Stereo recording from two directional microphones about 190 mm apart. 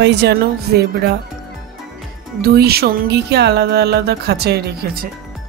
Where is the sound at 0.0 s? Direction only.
65° right (ahead or behind).